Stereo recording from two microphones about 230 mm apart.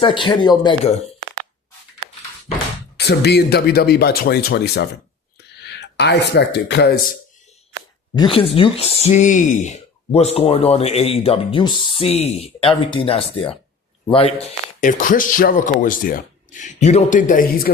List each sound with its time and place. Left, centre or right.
0.0 s speech: left
3.0 s speech: left
8.1 s a man's voice: left